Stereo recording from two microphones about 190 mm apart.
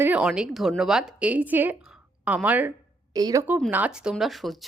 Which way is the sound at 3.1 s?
20° right (ahead or behind).